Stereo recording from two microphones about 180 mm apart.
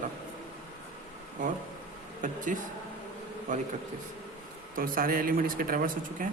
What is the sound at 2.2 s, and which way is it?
Speech, 45° right (ahead or behind).